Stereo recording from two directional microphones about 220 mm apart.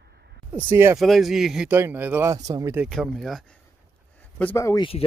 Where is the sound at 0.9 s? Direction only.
Centre (ahead or behind).